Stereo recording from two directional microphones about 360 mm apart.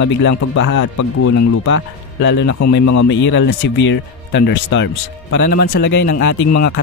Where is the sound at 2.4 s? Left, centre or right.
Left.